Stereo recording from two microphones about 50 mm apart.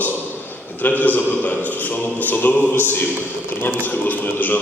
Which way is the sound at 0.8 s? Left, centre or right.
Left.